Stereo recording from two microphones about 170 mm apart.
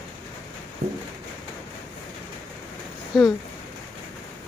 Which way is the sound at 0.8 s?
45° right (ahead or behind).